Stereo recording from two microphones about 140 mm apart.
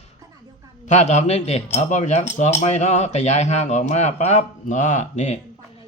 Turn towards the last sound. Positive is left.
turn(degrees=55)  # may be behind; listen again after turning